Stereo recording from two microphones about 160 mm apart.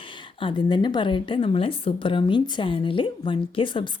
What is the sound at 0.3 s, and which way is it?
A woman's voice, 30° left (ahead or behind).